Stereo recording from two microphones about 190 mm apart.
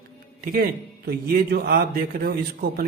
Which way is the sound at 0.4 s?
50° right (ahead or behind).